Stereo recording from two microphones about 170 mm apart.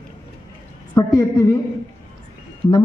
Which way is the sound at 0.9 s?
20° left (ahead or behind).